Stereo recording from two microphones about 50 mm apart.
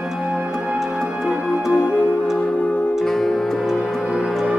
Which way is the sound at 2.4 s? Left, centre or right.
Left.